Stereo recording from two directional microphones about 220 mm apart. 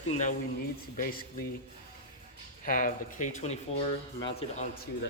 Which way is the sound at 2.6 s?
40° left (ahead or behind).